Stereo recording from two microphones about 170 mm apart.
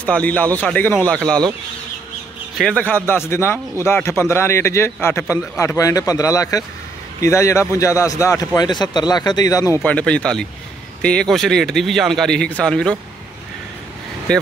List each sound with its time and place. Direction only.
0.0 s a man's voice: 10° left (ahead or behind)
2.5 s a man's voice: 5° left (ahead or behind)
9.8 s a man's voice: 5° left (ahead or behind)
14.3 s speech: 5° left (ahead or behind)